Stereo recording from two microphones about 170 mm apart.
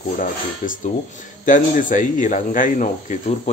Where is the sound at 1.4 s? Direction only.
50° left (ahead or behind).